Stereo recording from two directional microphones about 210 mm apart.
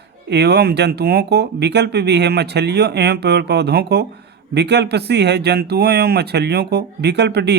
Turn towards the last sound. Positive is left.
turn(degrees=-50)  # may be behind; listen again after turning